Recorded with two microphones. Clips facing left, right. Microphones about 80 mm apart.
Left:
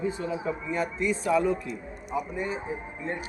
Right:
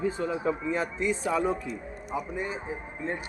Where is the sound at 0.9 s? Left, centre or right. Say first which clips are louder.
Left 6 dB; right.